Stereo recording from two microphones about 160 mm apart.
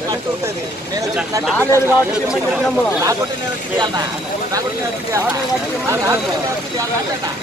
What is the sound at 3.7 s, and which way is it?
Speech, 25° right (ahead or behind).